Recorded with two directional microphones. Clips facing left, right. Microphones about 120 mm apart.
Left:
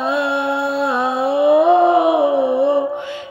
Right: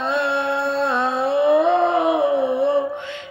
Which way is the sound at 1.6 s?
5° left (ahead or behind).